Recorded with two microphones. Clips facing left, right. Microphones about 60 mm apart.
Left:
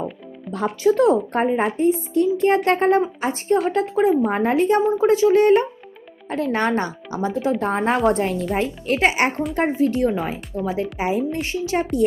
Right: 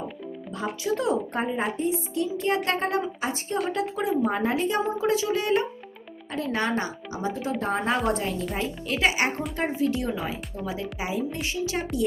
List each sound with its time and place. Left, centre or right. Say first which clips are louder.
0.9 s speech: left 10 dB; left
1.4 s a woman's voice: left 7 dB; left